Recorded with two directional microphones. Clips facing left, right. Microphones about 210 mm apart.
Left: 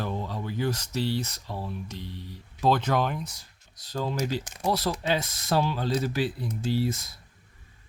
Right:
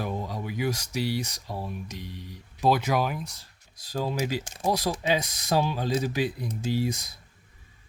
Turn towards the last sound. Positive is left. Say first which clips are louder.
# even
turn(degrees=-15)  # may be behind; listen again after turning